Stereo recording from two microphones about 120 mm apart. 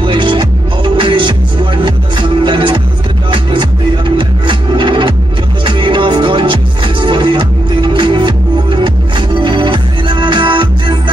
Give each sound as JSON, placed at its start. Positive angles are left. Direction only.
{"t": 0.0, "sound": "music", "side_deg": -45}
{"t": 4.2, "sound": "music", "side_deg": -45}